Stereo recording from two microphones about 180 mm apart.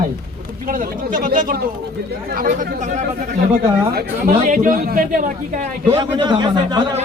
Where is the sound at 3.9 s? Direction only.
60° right (ahead or behind).